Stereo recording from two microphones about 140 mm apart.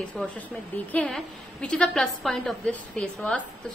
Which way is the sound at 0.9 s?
5° left (ahead or behind).